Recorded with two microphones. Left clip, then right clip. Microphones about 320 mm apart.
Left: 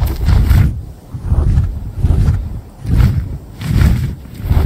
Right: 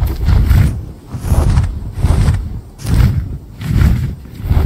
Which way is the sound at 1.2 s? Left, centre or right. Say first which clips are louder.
Right 5 dB; right.